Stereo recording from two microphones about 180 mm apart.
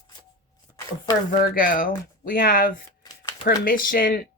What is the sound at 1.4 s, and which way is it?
Speech, 50° left (ahead or behind).